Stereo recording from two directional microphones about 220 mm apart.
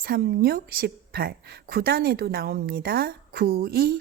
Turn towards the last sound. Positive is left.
turn(degrees=-45)  # may be behind; listen again after turning